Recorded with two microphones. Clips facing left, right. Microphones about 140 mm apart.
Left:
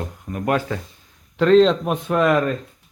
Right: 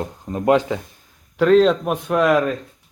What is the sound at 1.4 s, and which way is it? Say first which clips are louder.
Speech: even; 5° right (ahead or behind).